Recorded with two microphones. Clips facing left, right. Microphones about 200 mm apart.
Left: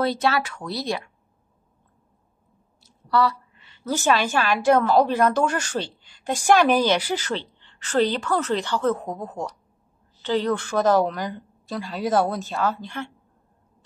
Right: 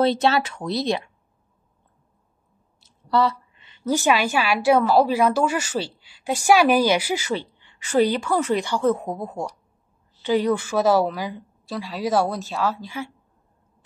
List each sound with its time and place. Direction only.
0.0 s speech: 25° right (ahead or behind)
2.8 s a sound: 20° right (ahead or behind)
4.6 s a woman's voice: 10° right (ahead or behind)